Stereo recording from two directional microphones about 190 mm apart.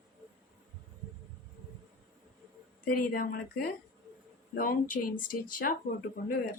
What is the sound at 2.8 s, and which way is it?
A woman's voice, 50° left (ahead or behind).